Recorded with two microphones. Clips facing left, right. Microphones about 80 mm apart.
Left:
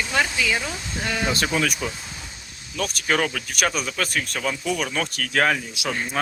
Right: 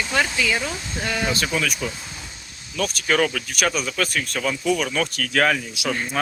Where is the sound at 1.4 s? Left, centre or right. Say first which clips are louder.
Left 1 dB; left.